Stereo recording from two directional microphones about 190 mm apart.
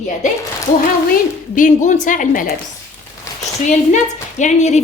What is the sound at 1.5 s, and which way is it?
Speech, 40° left (ahead or behind).